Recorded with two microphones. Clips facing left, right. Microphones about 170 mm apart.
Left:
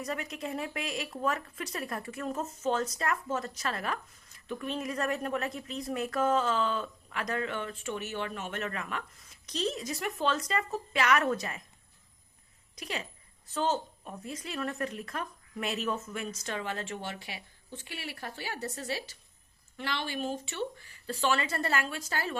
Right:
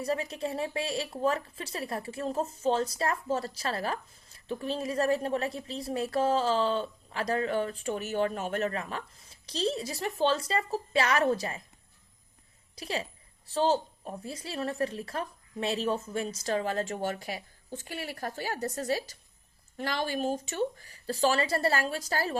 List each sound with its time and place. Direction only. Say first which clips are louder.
0.0 s speech: right 5 dB; 30° right (ahead or behind)
12.7 s speech: right 4 dB; 30° right (ahead or behind)